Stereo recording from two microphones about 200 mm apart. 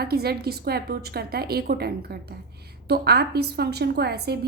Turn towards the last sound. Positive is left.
turn(degrees=-55)  # may be behind; listen again after turning